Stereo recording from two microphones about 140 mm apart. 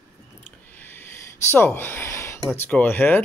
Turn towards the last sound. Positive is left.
turn(degrees=15)  # may be behind; listen again after turning